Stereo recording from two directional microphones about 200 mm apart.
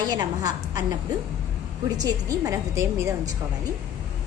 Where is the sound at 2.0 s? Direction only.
15° right (ahead or behind).